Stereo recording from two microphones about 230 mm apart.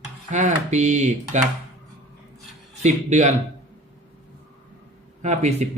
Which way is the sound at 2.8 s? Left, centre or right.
Right.